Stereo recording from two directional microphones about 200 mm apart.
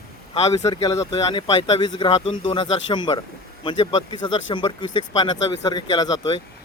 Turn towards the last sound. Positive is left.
turn(degrees=20)  # may be behind; listen again after turning